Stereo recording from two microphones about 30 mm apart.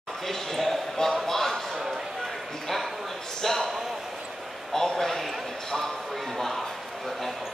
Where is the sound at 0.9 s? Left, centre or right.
Centre.